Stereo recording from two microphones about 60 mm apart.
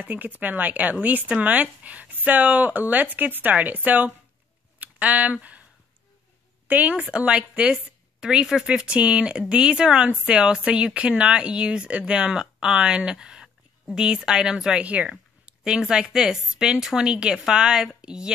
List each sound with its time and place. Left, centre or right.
0.0 s speech: right
4.7 s a sound: right
6.7 s speech: right
15.8 s speech: centre